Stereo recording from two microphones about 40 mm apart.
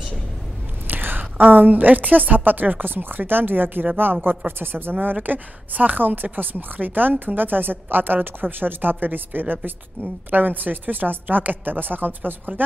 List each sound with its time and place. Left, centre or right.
0.8 s whispering: right
1.4 s a woman's voice: right
5.0 s a woman's voice: right